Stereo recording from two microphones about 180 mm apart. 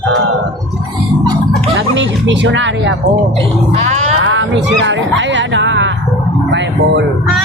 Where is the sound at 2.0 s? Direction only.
90° right.